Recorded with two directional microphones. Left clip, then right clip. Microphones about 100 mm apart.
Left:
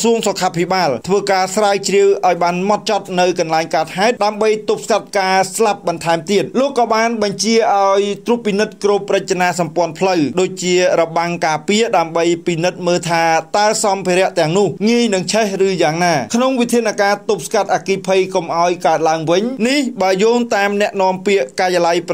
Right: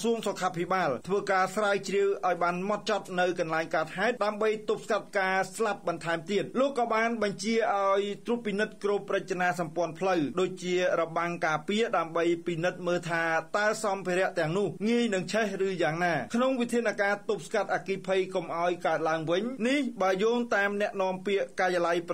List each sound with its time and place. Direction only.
0.0 s speech: 20° left (ahead or behind)